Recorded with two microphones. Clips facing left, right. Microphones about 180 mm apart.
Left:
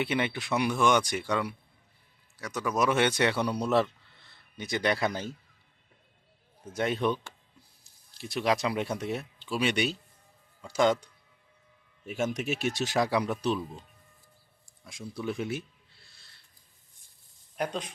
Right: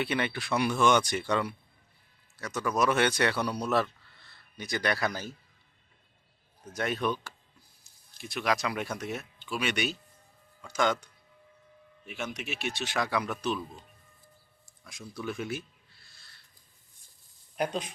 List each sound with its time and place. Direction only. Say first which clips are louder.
0.0 s a man's voice: left 1 dB; 20° left (ahead or behind)
6.7 s speech: left 2 dB; 25° left (ahead or behind)
12.0 s speech: left 7 dB; 45° left (ahead or behind)
14.8 s speech: left 3 dB; 25° left (ahead or behind)